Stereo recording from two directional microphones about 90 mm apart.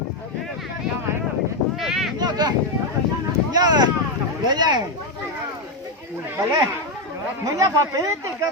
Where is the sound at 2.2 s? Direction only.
50° right (ahead or behind).